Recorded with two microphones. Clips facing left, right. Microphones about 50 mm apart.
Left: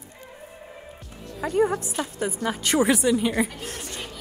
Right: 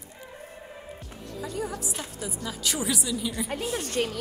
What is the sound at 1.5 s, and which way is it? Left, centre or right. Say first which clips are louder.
A woman's voice: left 12 dB; left.